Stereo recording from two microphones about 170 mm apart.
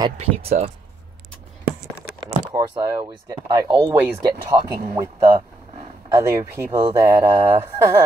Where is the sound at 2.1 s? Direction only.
25° right (ahead or behind).